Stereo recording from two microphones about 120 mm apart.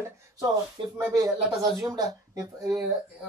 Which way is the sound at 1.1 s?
30° right (ahead or behind).